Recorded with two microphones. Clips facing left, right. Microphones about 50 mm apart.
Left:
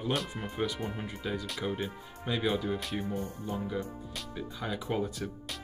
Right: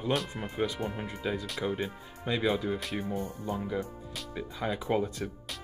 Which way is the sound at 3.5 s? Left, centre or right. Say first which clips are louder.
Right 2 dB; centre.